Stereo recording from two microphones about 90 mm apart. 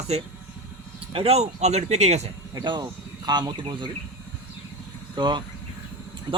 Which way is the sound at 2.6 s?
60° right (ahead or behind).